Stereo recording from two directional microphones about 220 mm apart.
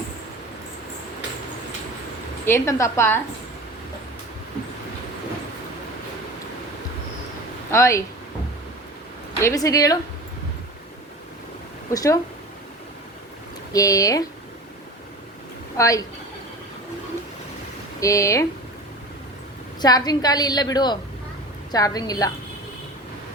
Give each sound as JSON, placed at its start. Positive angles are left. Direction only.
{"t": 2.4, "sound": "a woman's voice", "side_deg": 10}
{"t": 7.7, "sound": "a woman's voice", "side_deg": 15}
{"t": 9.4, "sound": "a woman's voice", "side_deg": 15}
{"t": 11.9, "sound": "a woman's voice", "side_deg": 15}
{"t": 13.7, "sound": "a woman's voice", "side_deg": 15}
{"t": 15.8, "sound": "a woman's voice", "side_deg": 15}
{"t": 18.0, "sound": "a woman's voice", "side_deg": 15}
{"t": 19.8, "sound": "a woman's voice", "side_deg": 15}